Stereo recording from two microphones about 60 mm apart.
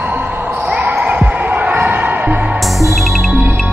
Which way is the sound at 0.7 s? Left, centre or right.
Right.